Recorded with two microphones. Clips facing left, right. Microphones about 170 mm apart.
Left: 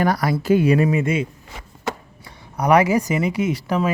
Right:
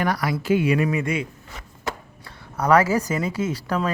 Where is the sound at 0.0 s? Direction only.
40° left (ahead or behind).